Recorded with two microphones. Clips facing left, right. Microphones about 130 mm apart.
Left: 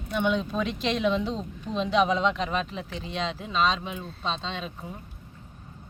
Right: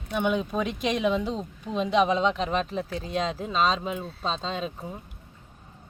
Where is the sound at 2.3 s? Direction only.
35° right (ahead or behind).